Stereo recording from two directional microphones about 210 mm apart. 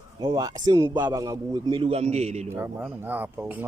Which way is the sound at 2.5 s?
10° right (ahead or behind).